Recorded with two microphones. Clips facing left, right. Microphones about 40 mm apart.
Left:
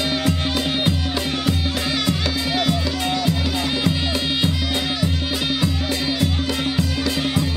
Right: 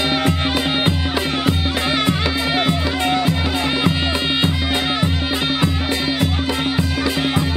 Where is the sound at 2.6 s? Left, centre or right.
Right.